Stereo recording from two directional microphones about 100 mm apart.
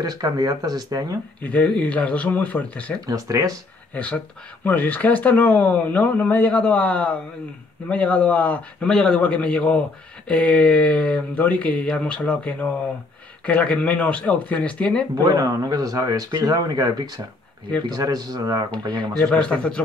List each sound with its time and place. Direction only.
0.0 s speech: 40° right (ahead or behind)
1.4 s a man's voice: 15° left (ahead or behind)
3.1 s speech: 35° right (ahead or behind)
3.9 s a man's voice: 15° left (ahead or behind)
15.2 s speech: 35° right (ahead or behind)
19.1 s a man's voice: 10° left (ahead or behind)